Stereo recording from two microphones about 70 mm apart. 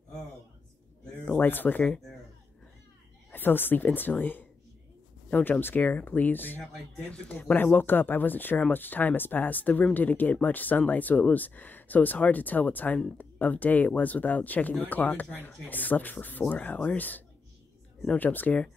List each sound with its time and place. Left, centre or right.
1.4 s speech: left
3.3 s a woman's voice: left